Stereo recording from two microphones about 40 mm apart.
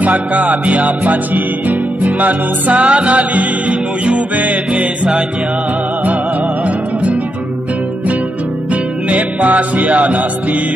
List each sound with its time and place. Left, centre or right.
0.0 s music: right
9.1 s music: right